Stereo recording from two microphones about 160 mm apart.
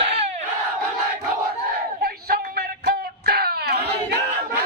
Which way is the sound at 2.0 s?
70° right (ahead or behind).